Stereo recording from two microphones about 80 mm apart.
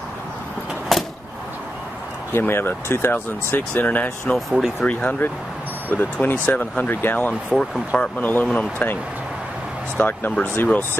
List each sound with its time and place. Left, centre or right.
0.9 s vehicle: centre
2.3 s speech: left
4.5 s speech: centre
4.8 s speech: centre
9.9 s speech: left